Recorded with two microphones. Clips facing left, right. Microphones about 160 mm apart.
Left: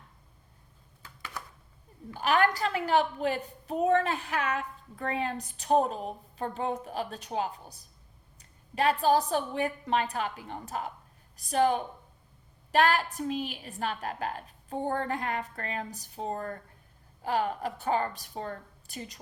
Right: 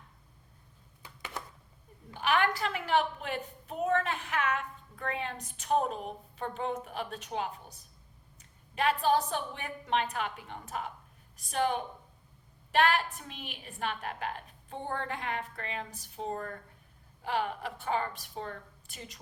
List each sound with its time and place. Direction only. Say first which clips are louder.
1.0 s computer keyboard: right 1 dB; 20° right (ahead or behind)
2.1 s a woman's voice: left 3 dB; 40° left (ahead or behind)